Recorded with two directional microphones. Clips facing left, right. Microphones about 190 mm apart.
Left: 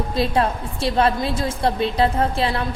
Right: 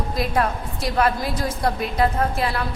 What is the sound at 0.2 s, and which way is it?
A woman's voice, 30° left (ahead or behind).